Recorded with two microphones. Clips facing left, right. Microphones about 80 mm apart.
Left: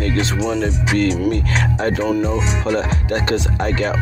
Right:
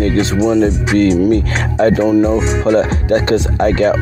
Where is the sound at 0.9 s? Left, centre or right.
Right.